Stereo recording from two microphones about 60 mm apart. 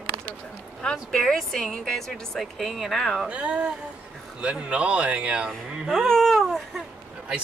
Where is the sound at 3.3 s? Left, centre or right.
Right.